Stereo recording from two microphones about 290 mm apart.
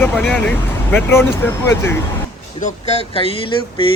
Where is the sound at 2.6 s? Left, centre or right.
Centre.